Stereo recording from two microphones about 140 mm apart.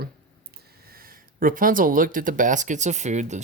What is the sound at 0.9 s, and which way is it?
Speech, 90° right.